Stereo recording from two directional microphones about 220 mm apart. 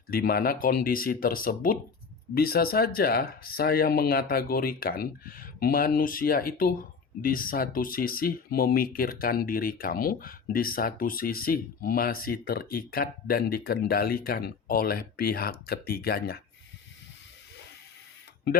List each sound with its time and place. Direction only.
0.1 s speech: 45° left (ahead or behind)